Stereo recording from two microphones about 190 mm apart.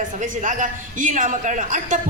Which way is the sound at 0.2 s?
40° right (ahead or behind).